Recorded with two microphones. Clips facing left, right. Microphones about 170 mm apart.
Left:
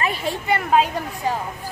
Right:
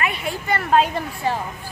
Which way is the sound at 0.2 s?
25° left (ahead or behind).